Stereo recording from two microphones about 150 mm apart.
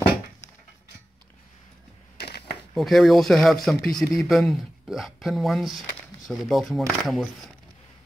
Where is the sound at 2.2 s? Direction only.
90° left.